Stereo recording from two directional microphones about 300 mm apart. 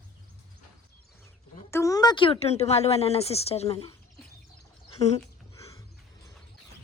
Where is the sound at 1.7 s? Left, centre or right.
Centre.